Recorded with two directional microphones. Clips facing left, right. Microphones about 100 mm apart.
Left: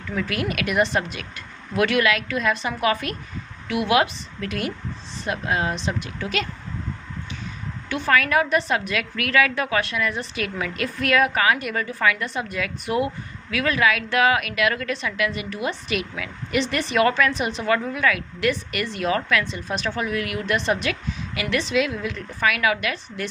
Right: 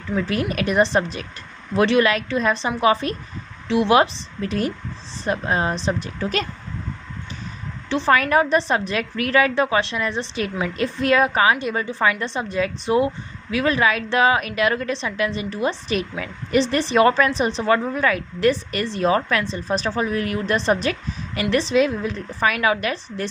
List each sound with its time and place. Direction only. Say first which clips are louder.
0.2 s a woman's voice: right 2 dB; 30° right (ahead or behind)
7.9 s a woman's voice: right 3 dB; 30° right (ahead or behind)